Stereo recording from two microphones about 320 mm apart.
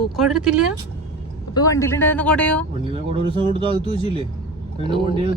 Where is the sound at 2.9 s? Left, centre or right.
Centre.